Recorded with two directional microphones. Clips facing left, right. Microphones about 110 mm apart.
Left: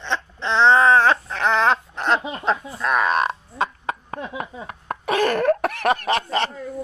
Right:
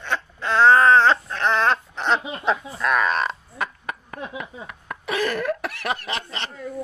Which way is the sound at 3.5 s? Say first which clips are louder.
Left 5 dB; 25° left (ahead or behind).